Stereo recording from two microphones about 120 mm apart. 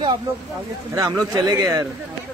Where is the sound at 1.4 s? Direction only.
25° right (ahead or behind).